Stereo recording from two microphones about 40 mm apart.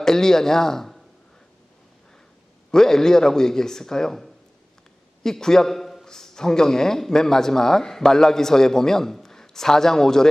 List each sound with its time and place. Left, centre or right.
0.0 s speech: centre
2.7 s a man's voice: centre